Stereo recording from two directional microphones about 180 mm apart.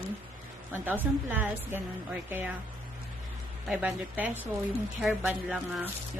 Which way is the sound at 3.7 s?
10° right (ahead or behind).